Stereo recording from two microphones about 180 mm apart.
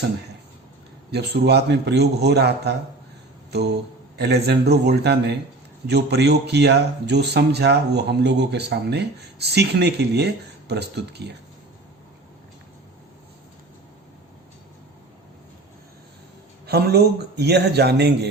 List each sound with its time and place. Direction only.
1.1 s a man's voice: 65° right (ahead or behind)
4.2 s a man's voice: 65° right (ahead or behind)
16.6 s a man's voice: 65° right (ahead or behind)